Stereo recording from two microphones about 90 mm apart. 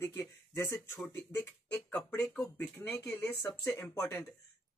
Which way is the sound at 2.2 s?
15° left (ahead or behind).